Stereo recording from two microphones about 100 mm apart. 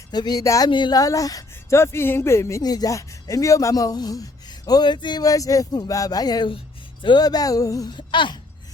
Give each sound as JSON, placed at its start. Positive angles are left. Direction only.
{"t": 0.1, "sound": "speech", "side_deg": 45}
{"t": 0.7, "sound": "speech", "side_deg": 50}
{"t": 1.8, "sound": "speech", "side_deg": 25}
{"t": 2.6, "sound": "speech", "side_deg": 40}
{"t": 7.9, "sound": "a sound", "side_deg": 55}